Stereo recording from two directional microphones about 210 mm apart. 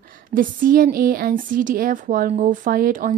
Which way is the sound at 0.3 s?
40° right (ahead or behind).